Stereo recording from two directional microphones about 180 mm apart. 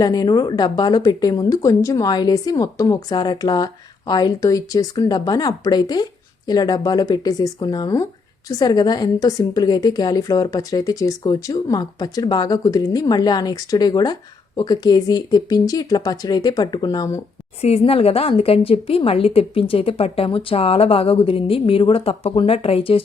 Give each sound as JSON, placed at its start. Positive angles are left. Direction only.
{"t": 0.0, "sound": "a woman's voice", "side_deg": 20}
{"t": 17.6, "sound": "a woman's voice", "side_deg": 35}